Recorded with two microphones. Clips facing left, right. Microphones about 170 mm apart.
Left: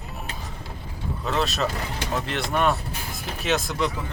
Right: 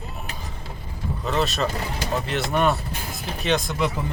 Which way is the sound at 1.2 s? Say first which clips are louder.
Right 1 dB; centre (ahead or behind).